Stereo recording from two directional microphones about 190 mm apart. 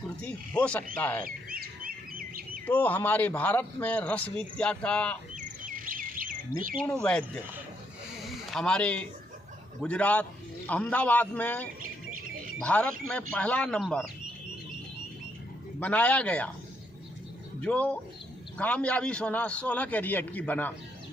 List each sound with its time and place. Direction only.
0.2 s a man's voice: 5° left (ahead or behind)
1.2 s fowl: 50° right (ahead or behind)
2.6 s a man's voice: 10° left (ahead or behind)
5.3 s bird: 45° right (ahead or behind)
6.8 s a man's voice: 5° left (ahead or behind)
8.2 s a sound: centre (ahead or behind)
9.8 s a man's voice: 5° left (ahead or behind)
11.8 s squawk: 45° right (ahead or behind)
12.6 s a man's voice: 5° left (ahead or behind)
15.8 s a man's voice: 5° left (ahead or behind)
17.6 s a man's voice: 5° left (ahead or behind)